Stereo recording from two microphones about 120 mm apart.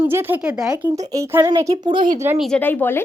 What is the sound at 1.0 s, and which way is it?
Speech, 30° right (ahead or behind).